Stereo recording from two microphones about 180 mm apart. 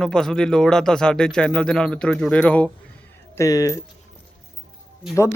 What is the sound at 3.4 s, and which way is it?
Speech, 20° left (ahead or behind).